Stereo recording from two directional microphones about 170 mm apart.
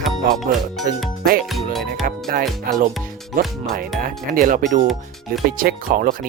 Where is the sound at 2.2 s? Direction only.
55° right (ahead or behind).